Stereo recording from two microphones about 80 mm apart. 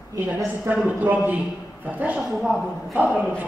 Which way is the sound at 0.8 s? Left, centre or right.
Right.